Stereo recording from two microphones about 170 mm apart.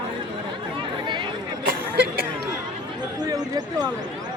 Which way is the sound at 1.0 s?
25° right (ahead or behind).